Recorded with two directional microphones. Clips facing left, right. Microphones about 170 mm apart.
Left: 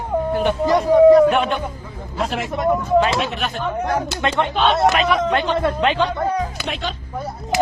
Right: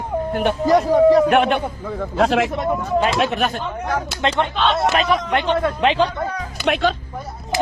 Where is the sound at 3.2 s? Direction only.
50° right (ahead or behind).